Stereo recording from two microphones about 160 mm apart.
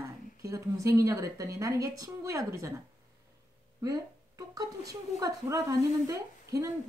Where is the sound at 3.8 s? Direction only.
20° right (ahead or behind).